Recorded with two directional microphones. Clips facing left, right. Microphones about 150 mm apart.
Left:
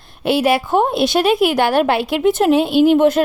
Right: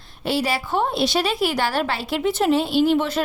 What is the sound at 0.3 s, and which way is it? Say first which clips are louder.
A woman's voice: left 7 dB; 55° left (ahead or behind).